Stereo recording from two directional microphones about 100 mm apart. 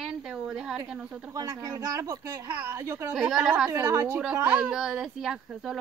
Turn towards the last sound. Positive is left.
turn(degrees=-5)  # may be behind; listen again after turning